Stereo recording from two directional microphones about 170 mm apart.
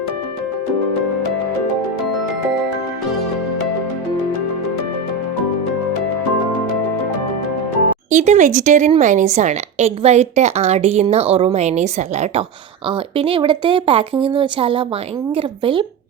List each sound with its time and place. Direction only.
8.1 s a woman's voice: 45° right (ahead or behind)
12.9 s speech: 30° right (ahead or behind)